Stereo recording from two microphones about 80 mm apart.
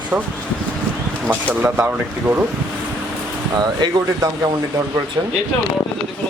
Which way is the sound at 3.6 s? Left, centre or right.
Right.